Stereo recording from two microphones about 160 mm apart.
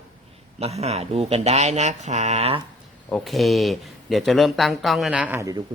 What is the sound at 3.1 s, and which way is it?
Speech, centre (ahead or behind).